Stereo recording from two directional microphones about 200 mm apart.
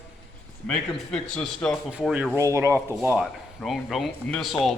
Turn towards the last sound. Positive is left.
turn(degrees=0)  # may be behind; listen again after turning